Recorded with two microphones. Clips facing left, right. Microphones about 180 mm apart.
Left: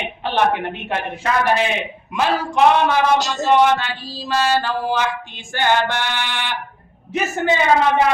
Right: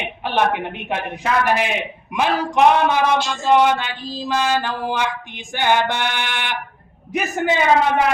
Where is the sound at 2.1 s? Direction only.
15° right (ahead or behind).